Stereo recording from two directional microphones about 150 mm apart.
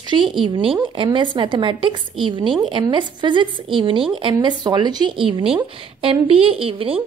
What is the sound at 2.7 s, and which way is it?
Speech, 30° right (ahead or behind).